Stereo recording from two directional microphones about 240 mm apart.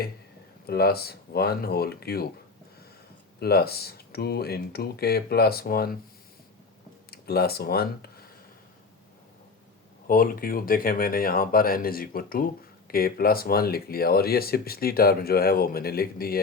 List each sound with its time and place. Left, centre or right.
0.7 s speech: left
3.4 s speech: left
7.1 s speech: left
10.1 s speech: left